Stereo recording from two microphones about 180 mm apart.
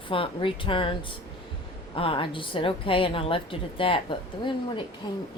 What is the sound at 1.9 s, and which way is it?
A woman's voice, 30° left (ahead or behind).